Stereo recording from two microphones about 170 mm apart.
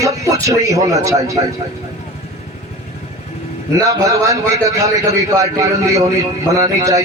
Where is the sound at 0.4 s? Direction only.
20° right (ahead or behind).